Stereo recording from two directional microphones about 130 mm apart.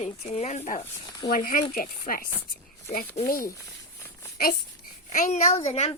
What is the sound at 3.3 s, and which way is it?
Speech, 90° left.